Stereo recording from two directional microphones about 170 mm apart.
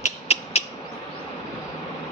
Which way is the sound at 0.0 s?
40° left (ahead or behind).